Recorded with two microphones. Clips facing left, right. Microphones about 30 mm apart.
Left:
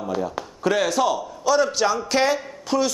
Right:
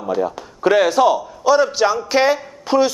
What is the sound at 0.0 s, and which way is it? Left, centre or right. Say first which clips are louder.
A man's voice: right 5 dB; centre.